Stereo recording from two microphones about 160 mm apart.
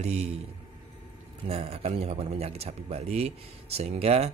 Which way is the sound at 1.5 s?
40° right (ahead or behind).